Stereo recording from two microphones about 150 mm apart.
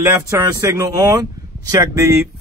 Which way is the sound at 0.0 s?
20° right (ahead or behind).